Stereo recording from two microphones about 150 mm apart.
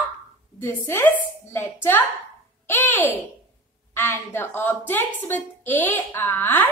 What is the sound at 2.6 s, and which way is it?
A woman's voice, 15° left (ahead or behind).